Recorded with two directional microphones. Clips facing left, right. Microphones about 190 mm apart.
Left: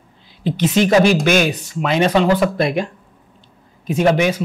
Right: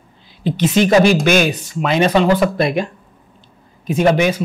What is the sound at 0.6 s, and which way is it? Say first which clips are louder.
Speech: right 1 dB; 10° right (ahead or behind).